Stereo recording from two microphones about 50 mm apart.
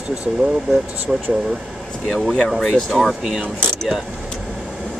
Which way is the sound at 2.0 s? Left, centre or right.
Centre.